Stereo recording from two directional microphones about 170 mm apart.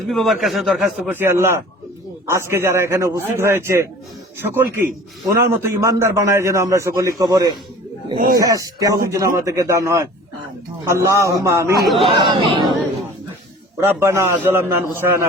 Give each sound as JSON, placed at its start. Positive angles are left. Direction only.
{"t": 0.1, "sound": "a man's voice", "side_deg": 0}
{"t": 8.1, "sound": "speech", "side_deg": -50}
{"t": 8.4, "sound": "a man's voice", "side_deg": -20}
{"t": 12.0, "sound": "speech", "side_deg": -25}
{"t": 13.8, "sound": "a man's voice", "side_deg": -15}